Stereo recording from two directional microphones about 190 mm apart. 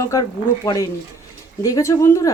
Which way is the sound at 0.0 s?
15° left (ahead or behind).